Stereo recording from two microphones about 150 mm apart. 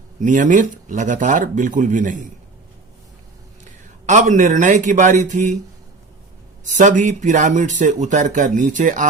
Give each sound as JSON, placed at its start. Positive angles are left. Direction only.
{"t": 0.2, "sound": "speech", "side_deg": -60}
{"t": 3.6, "sound": "a man's voice", "side_deg": -55}
{"t": 6.7, "sound": "speech", "side_deg": -55}